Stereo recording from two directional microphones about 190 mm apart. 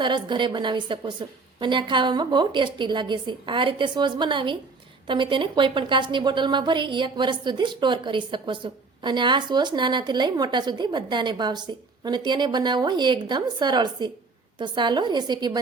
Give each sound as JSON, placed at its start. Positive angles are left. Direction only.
{"t": 0.0, "sound": "a woman's voice", "side_deg": -25}